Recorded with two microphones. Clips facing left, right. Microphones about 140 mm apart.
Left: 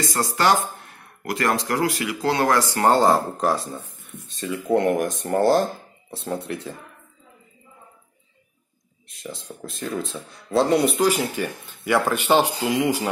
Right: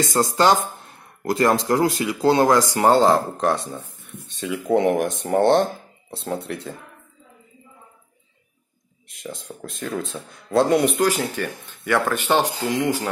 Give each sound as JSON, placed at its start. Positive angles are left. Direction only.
{"t": 0.1, "sound": "speech", "side_deg": -25}
{"t": 3.1, "sound": "speech", "side_deg": 5}
{"t": 9.1, "sound": "speech", "side_deg": 0}
{"t": 11.1, "sound": "speech", "side_deg": 10}